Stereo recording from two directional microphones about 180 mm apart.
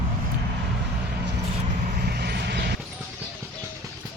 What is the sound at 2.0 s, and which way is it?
Vehicle, 65° right (ahead or behind).